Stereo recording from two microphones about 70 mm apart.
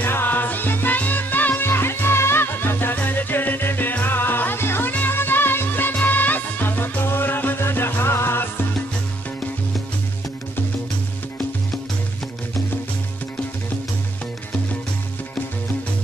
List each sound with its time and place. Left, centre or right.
0.0 s music: left